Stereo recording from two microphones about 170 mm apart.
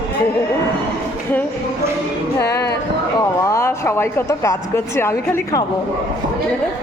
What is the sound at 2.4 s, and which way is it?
Speech, 20° left (ahead or behind).